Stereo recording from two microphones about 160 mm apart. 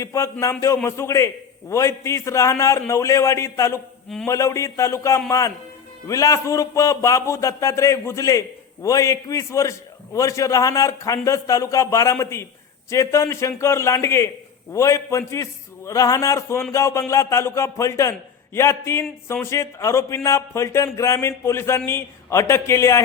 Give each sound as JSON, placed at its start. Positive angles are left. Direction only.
{"t": 0.0, "sound": "a man's voice", "side_deg": 20}